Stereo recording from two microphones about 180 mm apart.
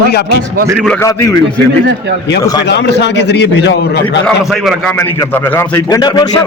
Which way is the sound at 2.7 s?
70° left (ahead or behind).